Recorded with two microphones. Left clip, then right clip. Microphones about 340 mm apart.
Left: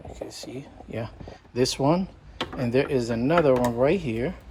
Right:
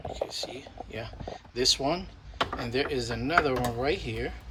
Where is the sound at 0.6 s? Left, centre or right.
Centre.